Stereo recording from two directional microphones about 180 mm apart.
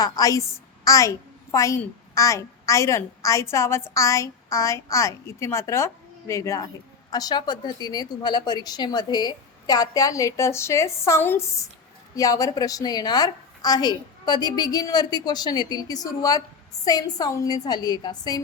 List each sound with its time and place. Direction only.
0.0 s a woman's voice: 20° left (ahead or behind)